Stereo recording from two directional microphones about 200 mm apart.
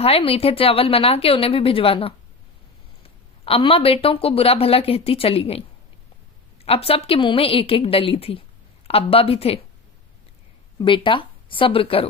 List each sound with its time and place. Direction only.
0.0 s a woman's voice: 30° left (ahead or behind)
3.4 s a woman's voice: 25° left (ahead or behind)
6.7 s a woman's voice: 30° left (ahead or behind)
10.8 s speech: 25° left (ahead or behind)